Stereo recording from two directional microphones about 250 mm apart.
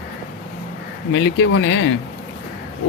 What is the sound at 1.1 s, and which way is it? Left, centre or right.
Speech, left.